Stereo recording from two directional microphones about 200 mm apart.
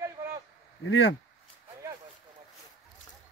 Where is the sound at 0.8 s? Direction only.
75° left (ahead or behind).